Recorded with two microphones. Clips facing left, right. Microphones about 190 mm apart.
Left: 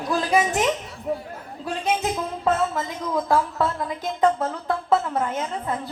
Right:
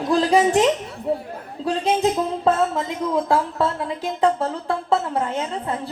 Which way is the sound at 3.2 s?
30° right (ahead or behind).